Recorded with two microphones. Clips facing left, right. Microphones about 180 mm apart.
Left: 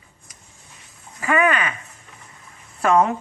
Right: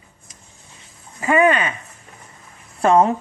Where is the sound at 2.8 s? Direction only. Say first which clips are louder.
Right 3 dB; 30° right (ahead or behind).